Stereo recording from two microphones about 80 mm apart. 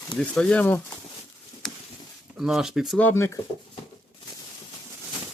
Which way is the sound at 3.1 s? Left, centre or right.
Left.